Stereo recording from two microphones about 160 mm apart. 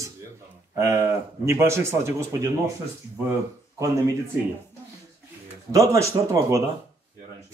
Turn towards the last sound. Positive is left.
turn(degrees=-20)  # may be behind; listen again after turning